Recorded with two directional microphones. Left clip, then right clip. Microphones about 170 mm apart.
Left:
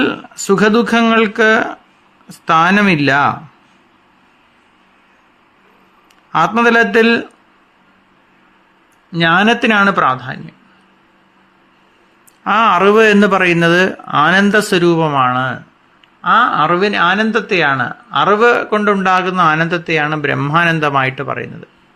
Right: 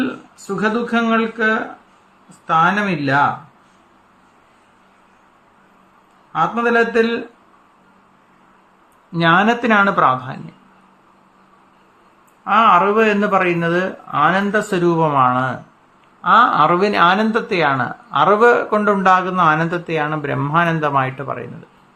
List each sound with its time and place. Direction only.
0.0 s a man's voice: 60° left (ahead or behind)
6.3 s a man's voice: 50° left (ahead or behind)
9.1 s speech: 20° left (ahead or behind)
12.5 s a man's voice: 45° left (ahead or behind); by 21.5 s 20° left (ahead or behind)